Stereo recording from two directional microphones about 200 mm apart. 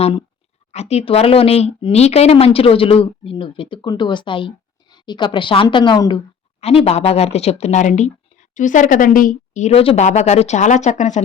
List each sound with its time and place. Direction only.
0.0 s speech: 25° left (ahead or behind)